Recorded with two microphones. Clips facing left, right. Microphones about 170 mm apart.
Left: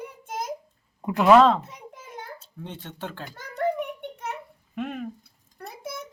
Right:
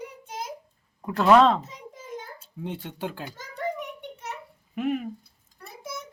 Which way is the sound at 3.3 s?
60° left (ahead or behind).